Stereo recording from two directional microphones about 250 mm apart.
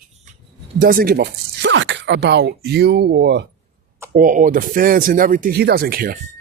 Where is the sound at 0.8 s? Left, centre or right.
Right.